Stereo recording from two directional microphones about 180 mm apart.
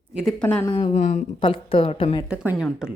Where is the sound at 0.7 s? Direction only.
35° left (ahead or behind).